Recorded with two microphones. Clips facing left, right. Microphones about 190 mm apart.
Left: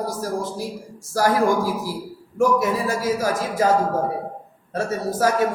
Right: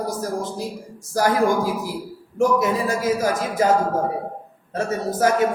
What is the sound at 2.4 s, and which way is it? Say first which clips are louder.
Speech: even; 20° right (ahead or behind).